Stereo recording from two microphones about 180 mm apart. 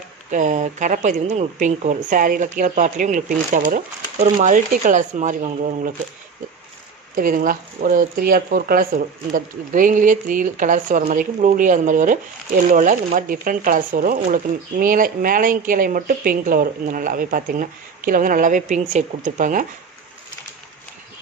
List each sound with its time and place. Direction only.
0.3 s speech: 45° right (ahead or behind)
7.2 s speech: 50° right (ahead or behind)